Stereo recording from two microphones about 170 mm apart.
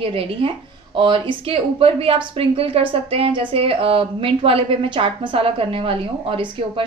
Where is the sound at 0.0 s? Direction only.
35° right (ahead or behind).